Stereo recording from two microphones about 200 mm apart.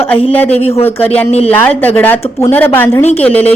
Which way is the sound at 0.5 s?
30° left (ahead or behind).